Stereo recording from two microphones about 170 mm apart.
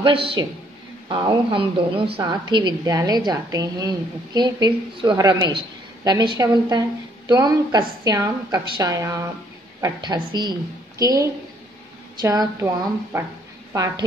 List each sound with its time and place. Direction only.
0.0 s a man's voice: 30° right (ahead or behind); by 13.3 s 15° right (ahead or behind)